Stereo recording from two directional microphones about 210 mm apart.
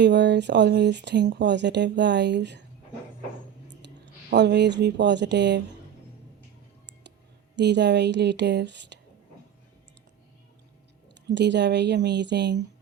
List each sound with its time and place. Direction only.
0.0 s speech: 55° right (ahead or behind)
3.7 s speech: 55° right (ahead or behind)
7.5 s speech: 55° right (ahead or behind)
11.1 s speech: 55° right (ahead or behind)